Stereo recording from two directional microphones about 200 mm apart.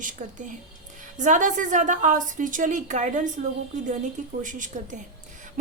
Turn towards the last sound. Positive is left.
turn(degrees=-40)  # may be behind; listen again after turning